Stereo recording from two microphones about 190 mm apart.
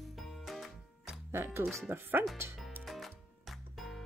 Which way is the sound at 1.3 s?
10° right (ahead or behind).